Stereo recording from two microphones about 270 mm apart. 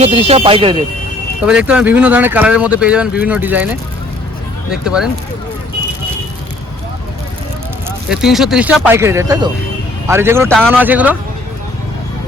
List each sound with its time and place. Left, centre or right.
0.0 s speech: right
1.5 s speech: centre
7.9 s speech: centre